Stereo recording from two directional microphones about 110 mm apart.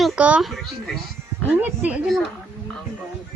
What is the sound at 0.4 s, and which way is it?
Music, centre (ahead or behind).